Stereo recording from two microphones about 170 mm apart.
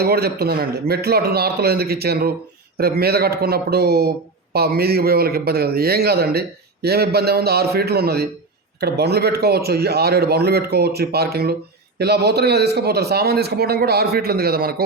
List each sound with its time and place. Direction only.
0.0 s a man's voice: 70° right (ahead or behind)